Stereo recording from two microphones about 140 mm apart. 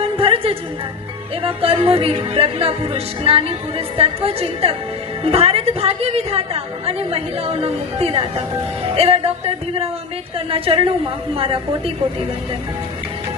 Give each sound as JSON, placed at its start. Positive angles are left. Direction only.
{"t": 0.0, "sound": "music", "side_deg": -40}
{"t": 10.3, "sound": "a woman's voice", "side_deg": -40}